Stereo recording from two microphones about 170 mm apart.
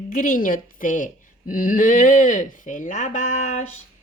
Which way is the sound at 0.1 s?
55° left (ahead or behind).